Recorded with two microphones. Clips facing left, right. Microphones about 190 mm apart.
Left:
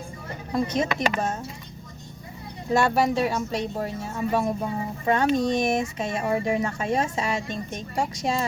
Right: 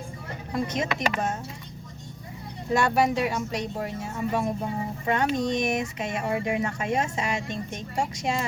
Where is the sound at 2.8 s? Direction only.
30° left (ahead or behind).